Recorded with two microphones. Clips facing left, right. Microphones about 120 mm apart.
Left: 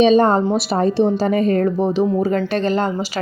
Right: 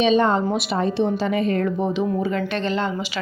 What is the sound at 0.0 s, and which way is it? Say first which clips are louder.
A woman's voice: left 5 dB; 40° left (ahead or behind).